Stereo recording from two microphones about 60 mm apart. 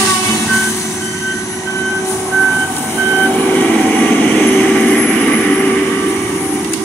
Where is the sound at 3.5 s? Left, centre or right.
Left.